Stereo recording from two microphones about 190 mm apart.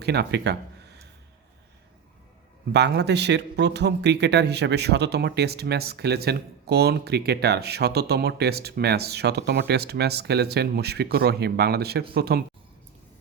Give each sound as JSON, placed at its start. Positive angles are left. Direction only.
{"t": 0.0, "sound": "speech", "side_deg": -60}
{"t": 2.7, "sound": "speech", "side_deg": -65}